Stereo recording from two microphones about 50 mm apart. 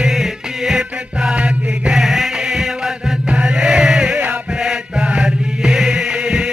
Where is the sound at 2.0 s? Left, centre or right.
Centre.